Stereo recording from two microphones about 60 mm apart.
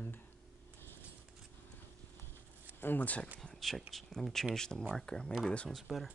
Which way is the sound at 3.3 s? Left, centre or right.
Centre.